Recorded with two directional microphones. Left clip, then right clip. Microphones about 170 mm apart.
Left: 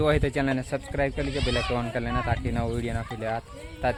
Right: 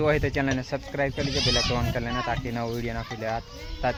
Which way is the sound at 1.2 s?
90° right.